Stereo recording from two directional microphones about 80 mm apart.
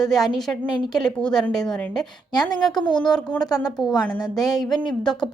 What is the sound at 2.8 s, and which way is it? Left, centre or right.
Speech, left.